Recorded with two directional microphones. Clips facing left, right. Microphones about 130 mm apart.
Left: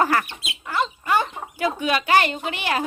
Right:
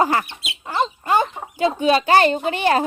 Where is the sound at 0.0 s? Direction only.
20° right (ahead or behind).